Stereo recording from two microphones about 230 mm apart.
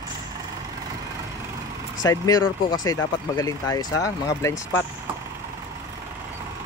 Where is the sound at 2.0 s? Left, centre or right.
Centre.